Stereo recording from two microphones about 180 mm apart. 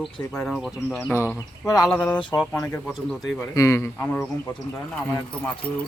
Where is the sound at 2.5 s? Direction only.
15° left (ahead or behind).